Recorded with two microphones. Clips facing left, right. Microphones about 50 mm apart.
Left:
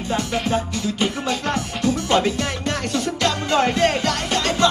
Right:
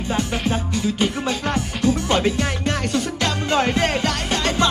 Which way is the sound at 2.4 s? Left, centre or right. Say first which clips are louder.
Right 1 dB; right.